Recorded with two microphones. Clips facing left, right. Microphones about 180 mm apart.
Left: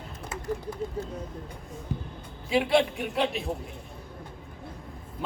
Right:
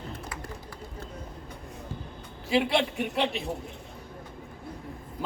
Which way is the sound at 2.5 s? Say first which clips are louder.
Left 2 dB; centre (ahead or behind).